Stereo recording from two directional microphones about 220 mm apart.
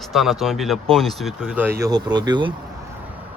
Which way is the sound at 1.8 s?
20° right (ahead or behind).